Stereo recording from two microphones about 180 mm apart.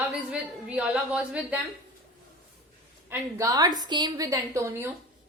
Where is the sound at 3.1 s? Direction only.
15° right (ahead or behind).